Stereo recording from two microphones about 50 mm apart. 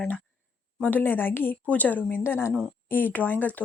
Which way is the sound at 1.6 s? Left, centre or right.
Left.